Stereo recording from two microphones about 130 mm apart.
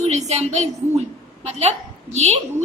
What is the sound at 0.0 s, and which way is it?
A woman's voice, 60° right (ahead or behind).